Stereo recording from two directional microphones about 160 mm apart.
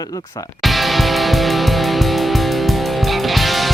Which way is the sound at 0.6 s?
Centre (ahead or behind).